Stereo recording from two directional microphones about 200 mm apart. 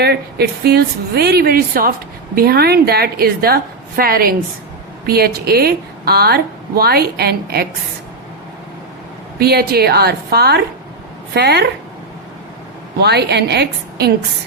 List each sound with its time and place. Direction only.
0.0 s a woman's voice: 55° right (ahead or behind)
9.4 s a woman's voice: 50° right (ahead or behind)
13.0 s a woman's voice: 55° right (ahead or behind)